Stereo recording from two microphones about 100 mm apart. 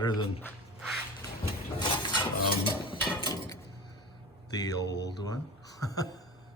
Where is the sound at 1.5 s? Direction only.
50° left (ahead or behind).